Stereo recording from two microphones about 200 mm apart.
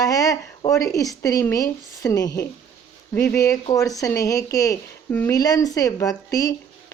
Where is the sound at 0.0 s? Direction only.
15° left (ahead or behind).